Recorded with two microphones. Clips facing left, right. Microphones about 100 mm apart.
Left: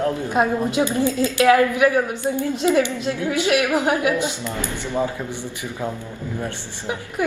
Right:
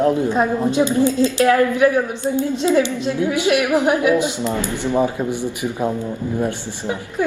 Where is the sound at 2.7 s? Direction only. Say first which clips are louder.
Right 1 dB; 20° right (ahead or behind).